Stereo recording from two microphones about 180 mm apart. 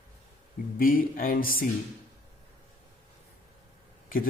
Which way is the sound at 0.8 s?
50° left (ahead or behind).